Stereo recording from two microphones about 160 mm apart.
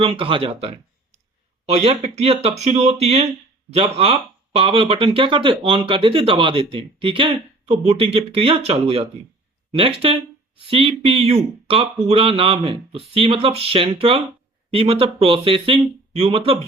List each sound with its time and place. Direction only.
0.0 s speech: 35° right (ahead or behind)